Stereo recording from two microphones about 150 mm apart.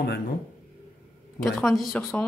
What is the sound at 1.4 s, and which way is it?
Speech, centre (ahead or behind).